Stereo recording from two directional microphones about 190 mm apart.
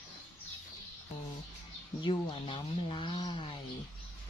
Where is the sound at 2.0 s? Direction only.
25° left (ahead or behind).